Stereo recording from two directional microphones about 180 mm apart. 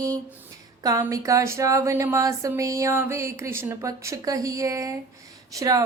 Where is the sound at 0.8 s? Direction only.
20° right (ahead or behind).